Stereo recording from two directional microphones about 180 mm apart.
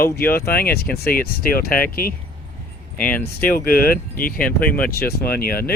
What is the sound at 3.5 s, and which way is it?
Speech, 55° left (ahead or behind).